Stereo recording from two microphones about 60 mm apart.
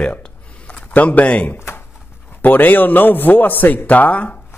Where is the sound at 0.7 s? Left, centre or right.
Left.